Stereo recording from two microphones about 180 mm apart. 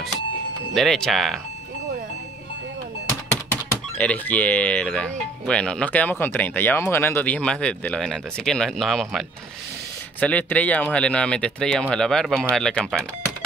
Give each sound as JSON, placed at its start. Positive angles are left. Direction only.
{"t": 0.7, "sound": "speech", "side_deg": 0}
{"t": 4.0, "sound": "speech", "side_deg": 10}
{"t": 10.2, "sound": "speech", "side_deg": 10}